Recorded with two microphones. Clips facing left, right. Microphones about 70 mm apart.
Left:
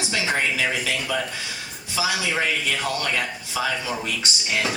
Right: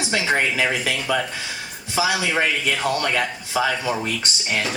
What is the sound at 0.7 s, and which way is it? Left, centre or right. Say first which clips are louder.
Speech: right 3 dB; right.